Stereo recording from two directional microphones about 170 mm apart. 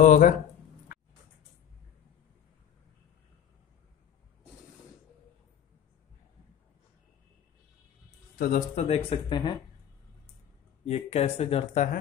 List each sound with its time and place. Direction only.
0.0 s speech: 50° left (ahead or behind)
8.4 s speech: 55° left (ahead or behind)
8.7 s speech: 35° left (ahead or behind)
10.9 s speech: 40° left (ahead or behind)